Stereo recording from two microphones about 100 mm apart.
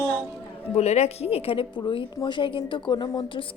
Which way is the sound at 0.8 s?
90° left.